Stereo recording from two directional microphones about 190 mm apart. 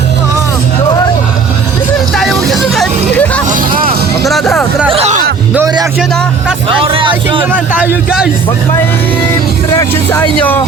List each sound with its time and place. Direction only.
2.1 s music: centre (ahead or behind)
3.5 s music: 50° right (ahead or behind)
4.3 s music: centre (ahead or behind)
4.9 s music: 35° right (ahead or behind)
5.5 s music: 15° right (ahead or behind)
6.8 s music: 25° right (ahead or behind)
7.5 s speech: 10° right (ahead or behind)
9.7 s speech: 10° left (ahead or behind)